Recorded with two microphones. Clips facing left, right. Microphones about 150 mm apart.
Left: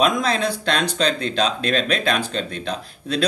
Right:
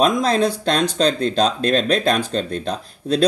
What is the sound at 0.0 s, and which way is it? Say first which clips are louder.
Speech: right 3 dB; 40° right (ahead or behind).